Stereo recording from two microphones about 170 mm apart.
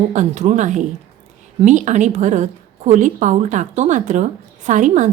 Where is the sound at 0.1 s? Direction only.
45° right (ahead or behind).